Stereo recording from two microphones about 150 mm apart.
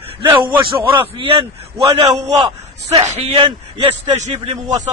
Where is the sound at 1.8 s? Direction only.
25° right (ahead or behind).